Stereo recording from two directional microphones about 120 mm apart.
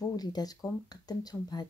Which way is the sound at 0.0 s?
35° left (ahead or behind).